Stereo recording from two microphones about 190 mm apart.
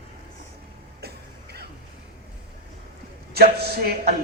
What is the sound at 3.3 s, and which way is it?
Speech, 55° right (ahead or behind).